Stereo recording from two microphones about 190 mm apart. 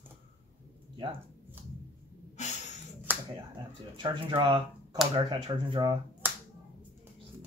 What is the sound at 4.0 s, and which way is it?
Speech, 25° right (ahead or behind).